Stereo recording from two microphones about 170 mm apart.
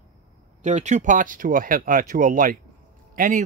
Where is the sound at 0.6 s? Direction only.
45° right (ahead or behind).